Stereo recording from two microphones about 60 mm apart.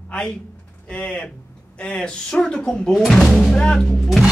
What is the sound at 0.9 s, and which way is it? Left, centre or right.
Speech, centre.